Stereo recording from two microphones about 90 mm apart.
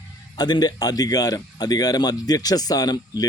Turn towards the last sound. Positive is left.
turn(degrees=50)  # may be behind; listen again after turning